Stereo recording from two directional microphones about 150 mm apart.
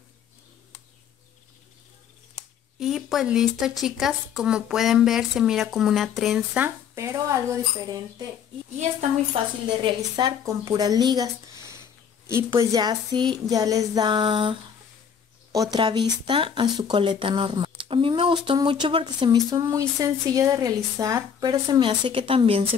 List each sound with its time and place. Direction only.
2.8 s speech: centre (ahead or behind)
6.6 s speech: 20° right (ahead or behind)
9.8 s speech: 25° right (ahead or behind)